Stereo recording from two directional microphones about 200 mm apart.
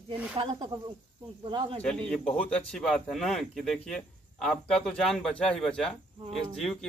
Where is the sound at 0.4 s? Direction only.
25° right (ahead or behind).